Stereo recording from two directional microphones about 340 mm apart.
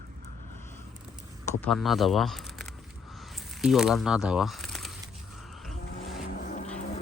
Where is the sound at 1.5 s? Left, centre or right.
Centre.